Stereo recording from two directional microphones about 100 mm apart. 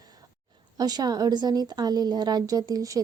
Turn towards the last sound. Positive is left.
turn(degrees=-35)  # may be behind; listen again after turning